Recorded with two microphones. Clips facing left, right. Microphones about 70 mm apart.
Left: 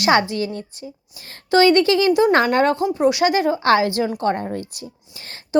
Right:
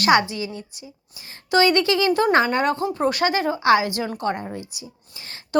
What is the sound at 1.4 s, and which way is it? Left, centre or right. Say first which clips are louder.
Speech: left 4 dB; left.